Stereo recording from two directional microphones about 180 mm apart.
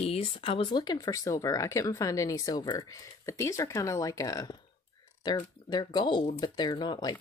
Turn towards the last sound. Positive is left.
turn(degrees=25)  # may be behind; listen again after turning